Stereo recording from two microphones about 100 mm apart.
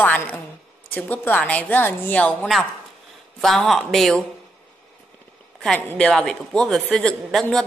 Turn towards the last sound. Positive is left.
turn(degrees=5)  # may be behind; listen again after turning